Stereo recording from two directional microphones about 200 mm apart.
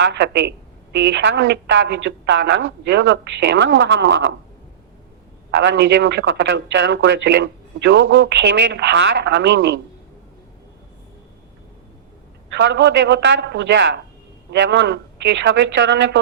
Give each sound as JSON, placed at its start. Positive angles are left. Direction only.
{"t": 0.0, "sound": "a man's voice", "side_deg": -65}
{"t": 5.5, "sound": "a man's voice", "side_deg": -65}
{"t": 12.5, "sound": "a man's voice", "side_deg": -65}